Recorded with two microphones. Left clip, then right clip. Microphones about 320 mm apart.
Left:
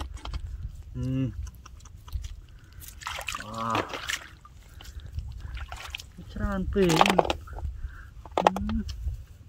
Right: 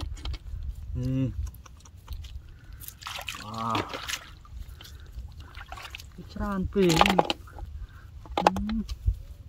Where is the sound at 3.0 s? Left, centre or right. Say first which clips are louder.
Left 2 dB; centre.